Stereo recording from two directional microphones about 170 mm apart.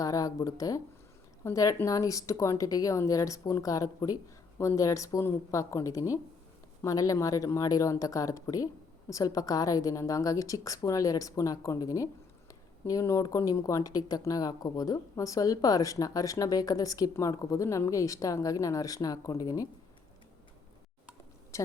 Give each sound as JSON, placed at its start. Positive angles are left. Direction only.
{"t": 0.0, "sound": "speech", "side_deg": 20}
{"t": 21.5, "sound": "a woman's voice", "side_deg": 15}